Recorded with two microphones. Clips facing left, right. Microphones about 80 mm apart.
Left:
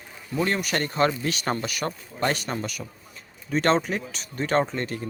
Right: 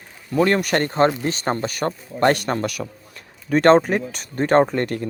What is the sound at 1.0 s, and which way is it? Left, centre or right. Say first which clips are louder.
Speech: right 5 dB; right.